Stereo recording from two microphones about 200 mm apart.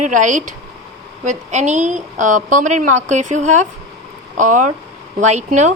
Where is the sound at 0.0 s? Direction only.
40° right (ahead or behind).